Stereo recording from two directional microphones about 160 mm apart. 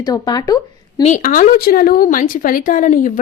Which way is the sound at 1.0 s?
55° left (ahead or behind).